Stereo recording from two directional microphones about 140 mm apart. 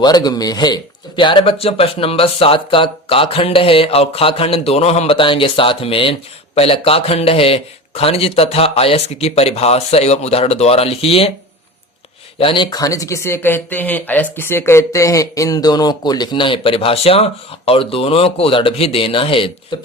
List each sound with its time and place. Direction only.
0.0 s speech: 30° left (ahead or behind); by 11.3 s 45° left (ahead or behind)
12.4 s speech: 40° left (ahead or behind)
12.7 s speech: 25° left (ahead or behind)